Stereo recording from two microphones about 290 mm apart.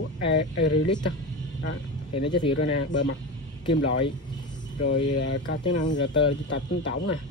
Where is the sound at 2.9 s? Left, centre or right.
Left.